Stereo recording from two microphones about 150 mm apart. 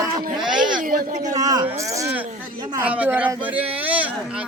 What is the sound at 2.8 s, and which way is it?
Speech, 10° right (ahead or behind).